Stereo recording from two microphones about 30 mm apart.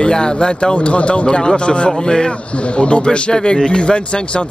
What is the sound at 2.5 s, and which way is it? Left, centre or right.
Speech, left.